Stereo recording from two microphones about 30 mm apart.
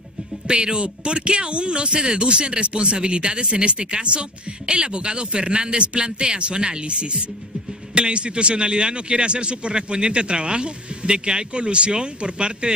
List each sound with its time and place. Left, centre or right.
0.5 s speech: right